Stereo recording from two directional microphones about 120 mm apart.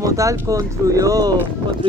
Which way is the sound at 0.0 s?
25° right (ahead or behind).